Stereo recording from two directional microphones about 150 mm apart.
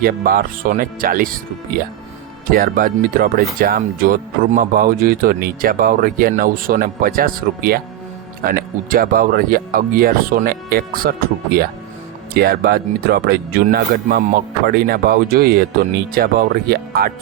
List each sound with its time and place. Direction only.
0.0 s speech: 75° right (ahead or behind)
12.3 s speech: 90° right